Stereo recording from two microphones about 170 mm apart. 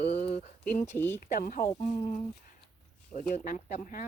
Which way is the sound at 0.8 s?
10° left (ahead or behind).